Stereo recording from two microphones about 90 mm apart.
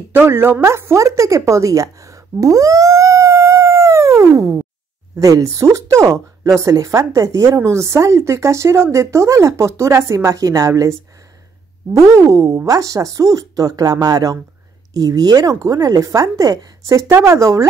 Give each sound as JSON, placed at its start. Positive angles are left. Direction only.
{"t": 0.1, "sound": "a woman's voice", "side_deg": -25}
{"t": 17.1, "sound": "speech", "side_deg": -30}